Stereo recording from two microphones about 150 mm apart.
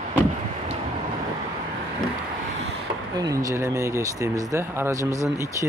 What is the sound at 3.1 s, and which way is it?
Speech, 25° right (ahead or behind).